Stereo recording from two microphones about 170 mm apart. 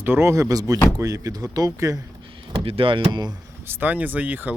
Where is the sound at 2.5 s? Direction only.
30° right (ahead or behind).